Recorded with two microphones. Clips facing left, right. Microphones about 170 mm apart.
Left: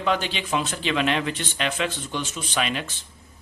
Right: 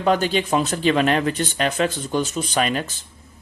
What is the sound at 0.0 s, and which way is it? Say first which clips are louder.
Speech: right 6 dB; 45° right (ahead or behind).